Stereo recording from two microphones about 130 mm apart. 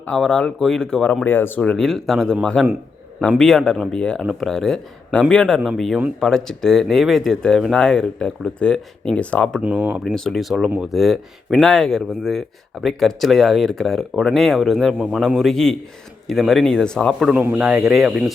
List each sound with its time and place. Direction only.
0.1 s speech: 5° left (ahead or behind)
9.6 s speech: 15° right (ahead or behind)
10.0 s speech: 5° left (ahead or behind)